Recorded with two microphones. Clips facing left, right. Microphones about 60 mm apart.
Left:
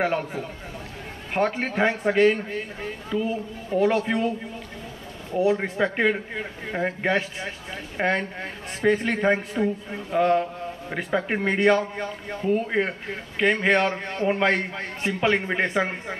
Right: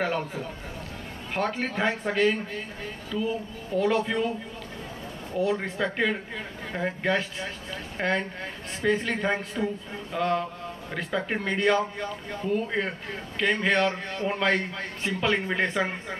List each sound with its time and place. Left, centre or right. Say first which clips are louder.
0.0 s a man's voice: left 3 dB; centre
1.9 s a man's voice: left 5 dB; centre
3.1 s a man's voice: left 2 dB; left
5.4 s a man's voice: left 4 dB; centre